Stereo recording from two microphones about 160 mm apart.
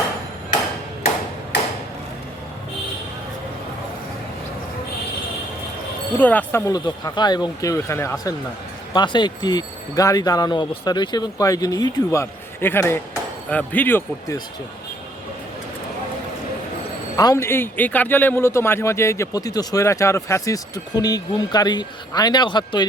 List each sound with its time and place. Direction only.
6.1 s a man's voice: 10° left (ahead or behind)
17.2 s a man's voice: 20° left (ahead or behind)